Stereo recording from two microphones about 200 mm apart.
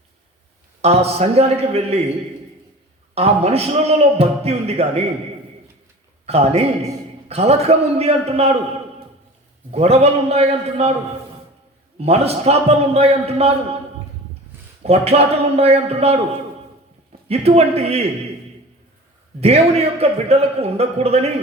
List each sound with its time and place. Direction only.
0.8 s a man's voice: 30° right (ahead or behind)
3.2 s a man's voice: 30° right (ahead or behind)
6.2 s a man's voice: 30° right (ahead or behind)
9.7 s a man's voice: 30° right (ahead or behind)
11.9 s a man's voice: 30° right (ahead or behind)
14.8 s a man's voice: 30° right (ahead or behind)
19.4 s a man's voice: 30° right (ahead or behind)